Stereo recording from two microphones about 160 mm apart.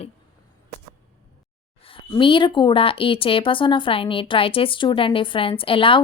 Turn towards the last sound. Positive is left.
turn(degrees=35)  # may be behind; listen again after turning